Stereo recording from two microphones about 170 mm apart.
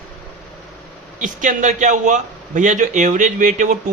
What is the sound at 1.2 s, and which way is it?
A man's voice, 50° right (ahead or behind).